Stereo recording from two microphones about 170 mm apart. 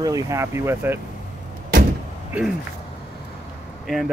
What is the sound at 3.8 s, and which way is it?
Speech, centre (ahead or behind).